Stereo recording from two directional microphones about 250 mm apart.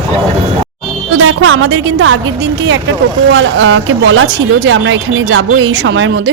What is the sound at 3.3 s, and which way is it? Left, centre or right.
Speech, right.